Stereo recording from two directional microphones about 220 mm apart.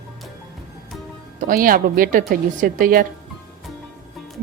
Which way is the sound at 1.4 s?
40° right (ahead or behind).